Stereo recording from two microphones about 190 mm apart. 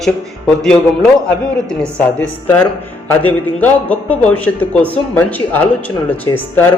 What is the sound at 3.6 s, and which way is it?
Speech, 10° left (ahead or behind).